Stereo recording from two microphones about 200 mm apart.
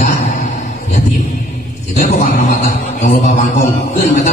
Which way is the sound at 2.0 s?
40° left (ahead or behind).